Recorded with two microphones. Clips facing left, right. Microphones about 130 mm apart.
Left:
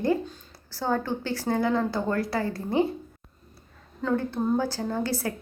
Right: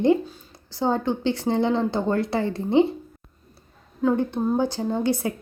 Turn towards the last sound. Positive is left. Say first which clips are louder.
# right 5 dB
turn(degrees=-20)  # may be behind; listen again after turning